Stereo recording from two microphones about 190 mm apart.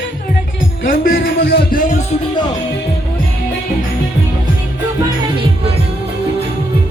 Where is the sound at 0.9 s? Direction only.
55° left (ahead or behind).